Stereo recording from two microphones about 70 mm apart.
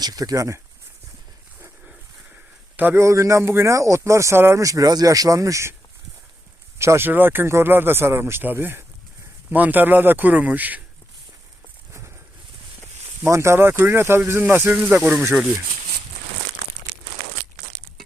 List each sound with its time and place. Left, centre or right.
0.0 s speech: right
1.8 s a sound: centre
3.0 s speech: right
4.6 s speech: right
6.7 s speech: right
13.2 s speech: right
14.9 s speech: centre